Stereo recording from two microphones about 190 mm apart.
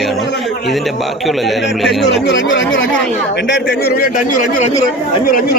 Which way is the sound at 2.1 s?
70° left (ahead or behind).